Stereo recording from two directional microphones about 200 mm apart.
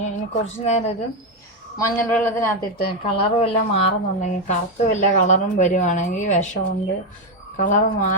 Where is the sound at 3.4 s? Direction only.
30° left (ahead or behind).